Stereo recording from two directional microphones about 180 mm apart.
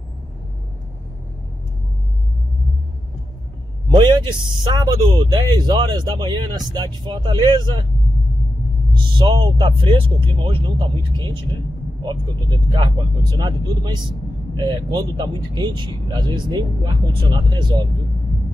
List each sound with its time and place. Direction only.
3.9 s a sound: 25° right (ahead or behind)
4.6 s speech: 20° right (ahead or behind)
8.9 s speech: 25° right (ahead or behind)